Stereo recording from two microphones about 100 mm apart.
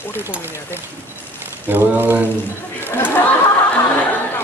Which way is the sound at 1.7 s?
20° right (ahead or behind).